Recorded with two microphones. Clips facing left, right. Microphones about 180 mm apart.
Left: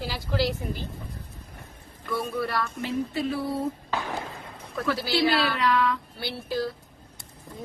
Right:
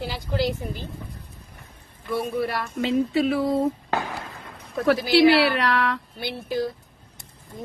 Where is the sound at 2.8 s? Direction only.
90° right.